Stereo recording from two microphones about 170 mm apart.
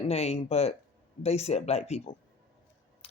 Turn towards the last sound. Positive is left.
turn(degrees=35)  # may be behind; listen again after turning